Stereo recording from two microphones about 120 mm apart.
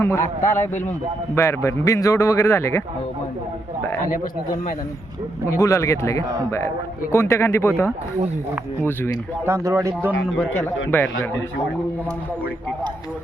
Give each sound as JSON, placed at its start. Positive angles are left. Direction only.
{"t": 0.0, "sound": "a man's voice", "side_deg": 25}
{"t": 1.4, "sound": "a man's voice", "side_deg": 25}
{"t": 5.5, "sound": "a man's voice", "side_deg": 25}
{"t": 9.5, "sound": "speech", "side_deg": -25}
{"t": 10.2, "sound": "a man's voice", "side_deg": 10}